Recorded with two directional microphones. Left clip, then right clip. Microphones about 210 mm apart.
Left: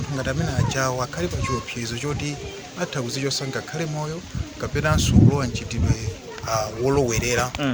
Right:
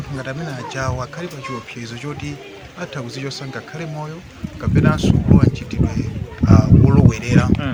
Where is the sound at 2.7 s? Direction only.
40° left (ahead or behind).